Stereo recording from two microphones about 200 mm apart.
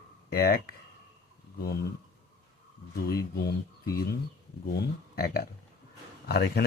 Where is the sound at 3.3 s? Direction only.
50° left (ahead or behind).